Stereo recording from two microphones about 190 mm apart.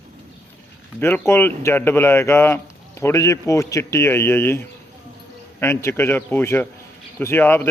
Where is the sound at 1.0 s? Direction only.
10° left (ahead or behind).